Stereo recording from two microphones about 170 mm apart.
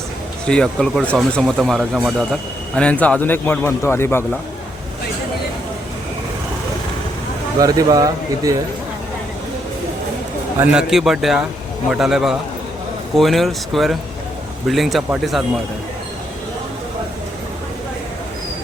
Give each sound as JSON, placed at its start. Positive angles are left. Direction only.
{"t": 0.4, "sound": "speech", "side_deg": 5}
{"t": 7.6, "sound": "speech", "side_deg": -20}
{"t": 10.6, "sound": "speech", "side_deg": -5}